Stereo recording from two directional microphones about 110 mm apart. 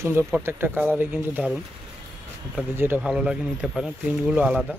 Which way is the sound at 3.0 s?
10° right (ahead or behind).